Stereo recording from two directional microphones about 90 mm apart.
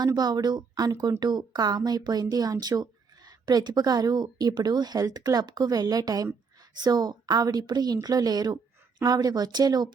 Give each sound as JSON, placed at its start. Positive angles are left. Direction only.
{"t": 0.0, "sound": "a woman's voice", "side_deg": -50}